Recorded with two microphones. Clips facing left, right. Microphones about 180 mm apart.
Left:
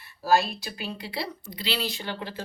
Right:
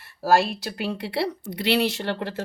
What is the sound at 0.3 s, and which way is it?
Speech, 90° right.